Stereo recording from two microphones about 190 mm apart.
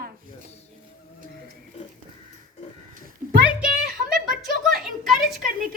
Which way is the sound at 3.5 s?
5° right (ahead or behind).